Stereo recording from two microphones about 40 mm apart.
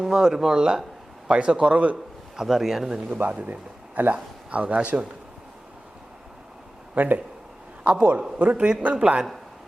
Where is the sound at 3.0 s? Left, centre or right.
Right.